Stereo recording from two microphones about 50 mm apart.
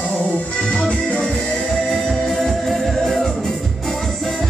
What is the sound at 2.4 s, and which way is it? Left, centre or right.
Music, centre.